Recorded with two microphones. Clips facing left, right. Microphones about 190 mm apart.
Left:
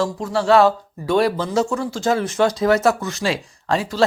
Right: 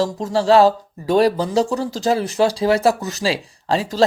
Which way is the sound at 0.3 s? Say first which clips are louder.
Right 2 dB; 35° right (ahead or behind).